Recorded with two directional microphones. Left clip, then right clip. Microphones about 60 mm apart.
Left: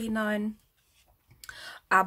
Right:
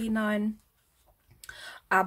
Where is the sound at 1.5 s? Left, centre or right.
Left.